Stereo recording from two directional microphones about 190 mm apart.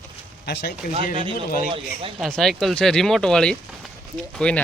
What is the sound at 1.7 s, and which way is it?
Speech, 30° right (ahead or behind).